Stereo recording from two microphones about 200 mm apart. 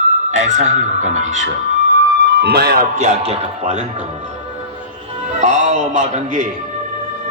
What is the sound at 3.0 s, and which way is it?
Speech, 35° right (ahead or behind).